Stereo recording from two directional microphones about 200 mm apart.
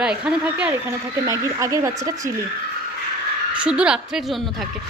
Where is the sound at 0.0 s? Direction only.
5° right (ahead or behind).